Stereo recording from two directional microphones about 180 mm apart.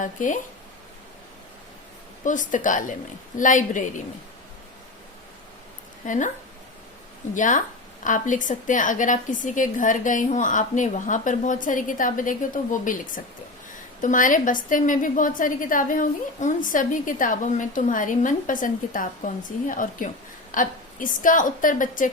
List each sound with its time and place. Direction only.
0.0 s a woman's voice: 45° left (ahead or behind)
2.2 s a woman's voice: 45° left (ahead or behind)
6.1 s a woman's voice: 45° left (ahead or behind)
7.3 s a woman's voice: 45° left (ahead or behind)